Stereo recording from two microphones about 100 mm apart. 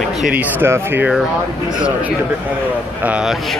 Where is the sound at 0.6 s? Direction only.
25° right (ahead or behind).